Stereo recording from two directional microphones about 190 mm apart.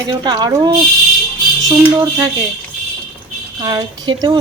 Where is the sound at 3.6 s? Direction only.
20° right (ahead or behind).